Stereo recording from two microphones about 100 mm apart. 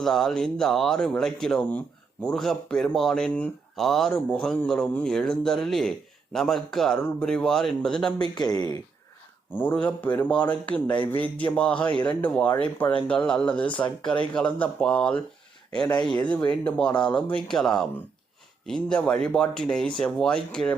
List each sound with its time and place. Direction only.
0.0 s speech: 5° left (ahead or behind)
3.8 s speech: centre (ahead or behind)
8.2 s speech: 40° left (ahead or behind)
9.5 s speech: 20° left (ahead or behind)
16.6 s speech: 15° left (ahead or behind)